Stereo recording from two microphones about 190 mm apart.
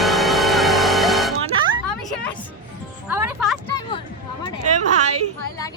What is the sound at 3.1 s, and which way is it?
Music, 10° right (ahead or behind).